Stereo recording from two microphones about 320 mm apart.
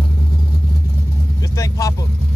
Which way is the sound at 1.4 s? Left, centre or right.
Centre.